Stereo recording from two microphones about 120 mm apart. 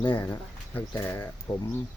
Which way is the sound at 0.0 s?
45° left (ahead or behind).